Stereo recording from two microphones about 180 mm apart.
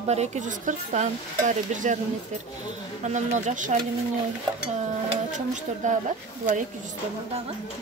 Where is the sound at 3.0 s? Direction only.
40° right (ahead or behind).